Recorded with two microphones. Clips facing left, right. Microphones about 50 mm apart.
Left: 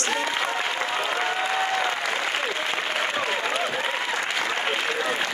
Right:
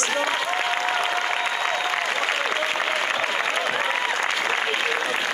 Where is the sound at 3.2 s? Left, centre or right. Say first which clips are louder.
Right 2 dB; right.